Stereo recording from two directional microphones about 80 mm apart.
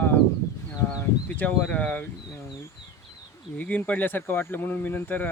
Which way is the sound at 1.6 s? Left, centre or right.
Centre.